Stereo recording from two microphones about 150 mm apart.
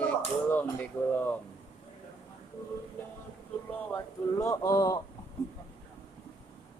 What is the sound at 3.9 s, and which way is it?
Speech, 20° left (ahead or behind).